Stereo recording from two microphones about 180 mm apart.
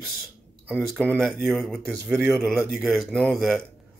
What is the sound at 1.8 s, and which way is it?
Speech, 15° right (ahead or behind).